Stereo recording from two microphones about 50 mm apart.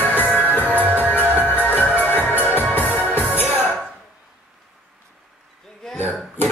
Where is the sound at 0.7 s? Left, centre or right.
Right.